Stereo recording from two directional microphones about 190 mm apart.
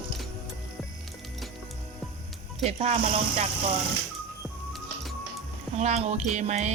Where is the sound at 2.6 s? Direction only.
35° right (ahead or behind).